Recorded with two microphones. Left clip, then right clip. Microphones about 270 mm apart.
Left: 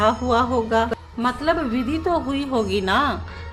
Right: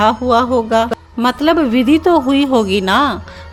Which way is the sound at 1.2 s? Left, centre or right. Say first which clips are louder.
Right 8 dB; right.